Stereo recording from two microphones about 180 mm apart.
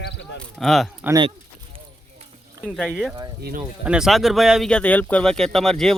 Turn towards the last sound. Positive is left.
turn(degrees=0)  # may be behind; listen again after turning